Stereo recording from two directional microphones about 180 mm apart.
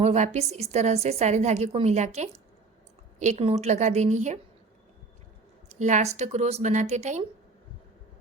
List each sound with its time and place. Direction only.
0.0 s a woman's voice: 35° right (ahead or behind)
5.8 s a woman's voice: 40° right (ahead or behind)